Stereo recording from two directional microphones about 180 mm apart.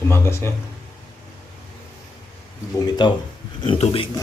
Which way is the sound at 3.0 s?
25° left (ahead or behind).